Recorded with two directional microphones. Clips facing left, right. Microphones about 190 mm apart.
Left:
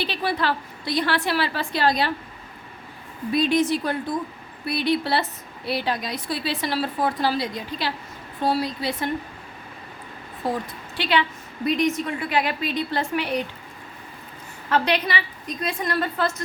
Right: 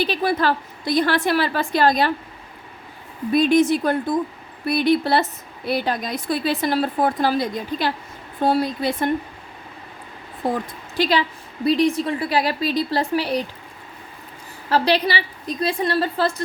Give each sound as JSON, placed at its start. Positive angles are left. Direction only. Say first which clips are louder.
{"t": 0.0, "sound": "speech", "louder": "right 5 dB", "side_deg": -45}
{"t": 3.3, "sound": "speech", "louder": "right 5 dB", "side_deg": -50}
{"t": 10.9, "sound": "a woman's voice", "louder": "right 3 dB", "side_deg": -40}
{"t": 14.7, "sound": "a woman's voice", "louder": "right 3 dB", "side_deg": -35}